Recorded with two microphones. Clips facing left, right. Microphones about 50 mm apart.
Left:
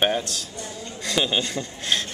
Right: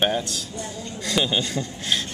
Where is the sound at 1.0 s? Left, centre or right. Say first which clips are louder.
Even; centre.